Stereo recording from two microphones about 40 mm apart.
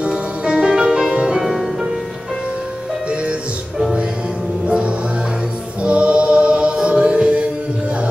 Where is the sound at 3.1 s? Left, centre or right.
Right.